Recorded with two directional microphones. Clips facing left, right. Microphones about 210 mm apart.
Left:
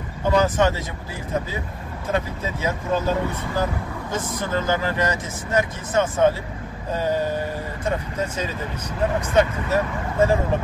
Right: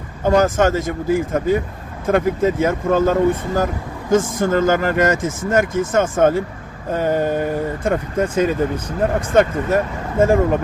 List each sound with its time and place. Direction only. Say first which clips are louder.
0.2 s speech: right 4 dB; 45° right (ahead or behind)